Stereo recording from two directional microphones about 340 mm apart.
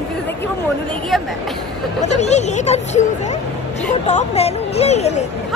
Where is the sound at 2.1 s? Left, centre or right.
Centre.